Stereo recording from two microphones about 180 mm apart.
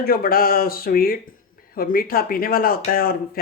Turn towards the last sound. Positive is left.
turn(degrees=55)  # may be behind; listen again after turning